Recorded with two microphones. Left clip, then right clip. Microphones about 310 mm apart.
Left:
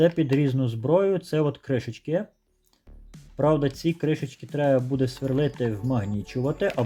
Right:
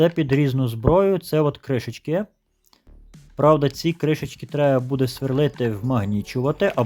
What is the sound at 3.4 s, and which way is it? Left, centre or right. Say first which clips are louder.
Speech: right 6 dB; centre.